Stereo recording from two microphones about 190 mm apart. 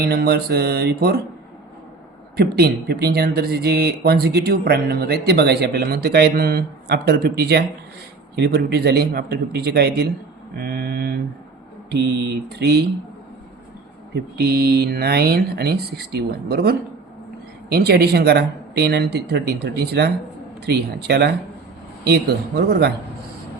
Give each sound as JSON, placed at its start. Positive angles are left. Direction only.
{"t": 0.0, "sound": "speech", "side_deg": -55}
{"t": 2.3, "sound": "speech", "side_deg": -55}
{"t": 10.6, "sound": "mantra", "side_deg": -55}
{"t": 11.9, "sound": "speech", "side_deg": -60}
{"t": 14.2, "sound": "speech", "side_deg": -55}